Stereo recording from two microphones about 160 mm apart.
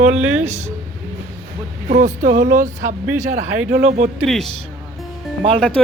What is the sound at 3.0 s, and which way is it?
Speech, 20° right (ahead or behind).